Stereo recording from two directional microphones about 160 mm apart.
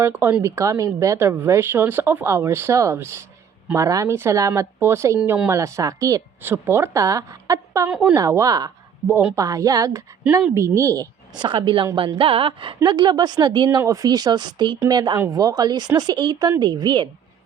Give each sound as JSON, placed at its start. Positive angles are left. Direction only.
{"t": 0.0, "sound": "a woman's voice", "side_deg": -15}
{"t": 7.9, "sound": "speech", "side_deg": -5}
{"t": 8.1, "sound": "speech", "side_deg": -20}